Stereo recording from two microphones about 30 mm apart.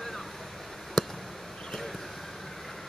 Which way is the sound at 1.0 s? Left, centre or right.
Centre.